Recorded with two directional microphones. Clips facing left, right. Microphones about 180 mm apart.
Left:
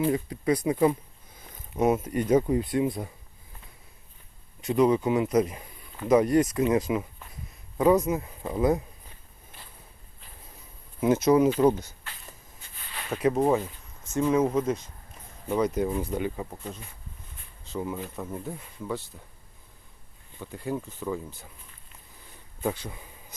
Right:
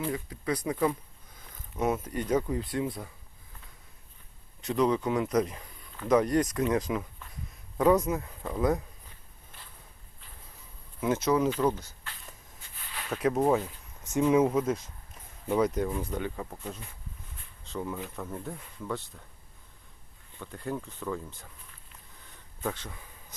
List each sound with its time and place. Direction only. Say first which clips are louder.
0.0 s speech: left 7 dB; 20° left (ahead or behind)
4.6 s speech: left 4 dB; 10° left (ahead or behind)
11.0 s speech: left 5 dB; 15° left (ahead or behind)
12.9 s speech: left 3 dB; centre (ahead or behind)
14.0 s speech: even; 10° right (ahead or behind); by 19.2 s 5° left (ahead or behind)
20.4 s speech: left 3 dB; 10° left (ahead or behind)
22.6 s speech: left 4 dB; 10° left (ahead or behind)